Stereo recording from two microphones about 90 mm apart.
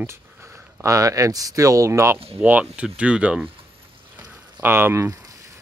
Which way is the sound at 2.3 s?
20° right (ahead or behind).